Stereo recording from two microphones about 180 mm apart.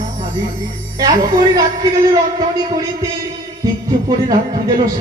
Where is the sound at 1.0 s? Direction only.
20° right (ahead or behind).